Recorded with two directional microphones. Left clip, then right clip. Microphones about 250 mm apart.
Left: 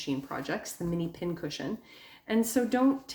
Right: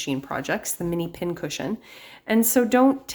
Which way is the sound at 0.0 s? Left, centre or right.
Right.